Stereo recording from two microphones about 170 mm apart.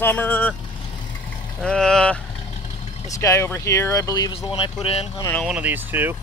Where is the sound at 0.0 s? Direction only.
10° left (ahead or behind).